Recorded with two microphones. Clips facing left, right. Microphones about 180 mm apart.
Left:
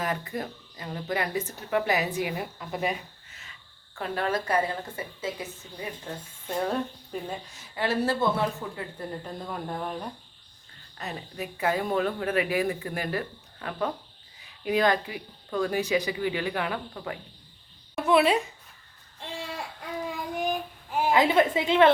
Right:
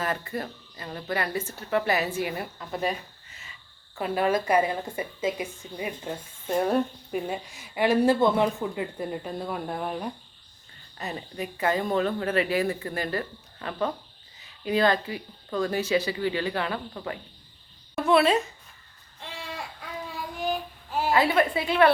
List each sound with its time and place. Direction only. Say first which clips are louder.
0.0 s speech: right 1 dB; 15° left (ahead or behind)
3.9 s a woman's voice: right 4 dB; 10° right (ahead or behind); by 16.8 s 10° left (ahead or behind)
16.9 s speech: right 1 dB; centre (ahead or behind)
17.9 s speech: right 1 dB; 15° left (ahead or behind)
20.4 s a sound: right 2 dB; 15° left (ahead or behind)